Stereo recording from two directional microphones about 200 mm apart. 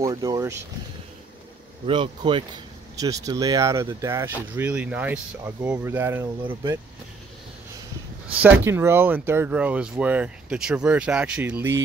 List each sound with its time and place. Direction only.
0.0 s speech: 20° right (ahead or behind)
1.9 s speech: 25° right (ahead or behind)
8.4 s speech: 10° right (ahead or behind)